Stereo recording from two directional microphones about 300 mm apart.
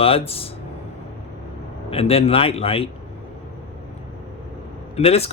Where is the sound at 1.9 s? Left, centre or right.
Centre.